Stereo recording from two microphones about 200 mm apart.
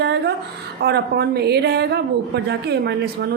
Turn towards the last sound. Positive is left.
turn(degrees=-55)  # may be behind; listen again after turning